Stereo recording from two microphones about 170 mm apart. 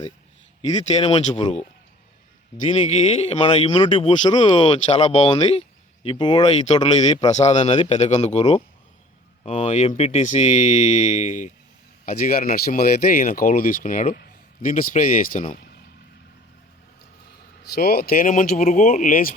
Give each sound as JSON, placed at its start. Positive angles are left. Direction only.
{"t": 0.9, "sound": "speech", "side_deg": 35}
{"t": 2.6, "sound": "speech", "side_deg": 40}
{"t": 7.3, "sound": "speech", "side_deg": 40}
{"t": 12.0, "sound": "speech", "side_deg": 55}
{"t": 17.7, "sound": "speech", "side_deg": 60}